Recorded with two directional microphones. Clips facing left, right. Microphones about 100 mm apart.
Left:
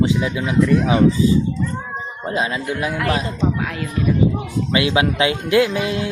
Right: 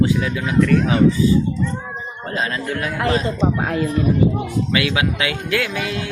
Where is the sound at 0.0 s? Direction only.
20° left (ahead or behind).